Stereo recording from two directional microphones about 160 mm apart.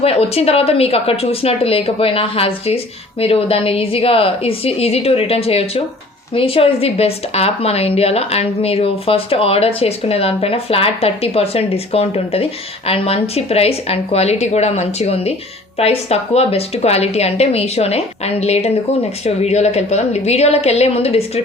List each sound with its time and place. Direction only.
0.0 s a woman's voice: 40° left (ahead or behind)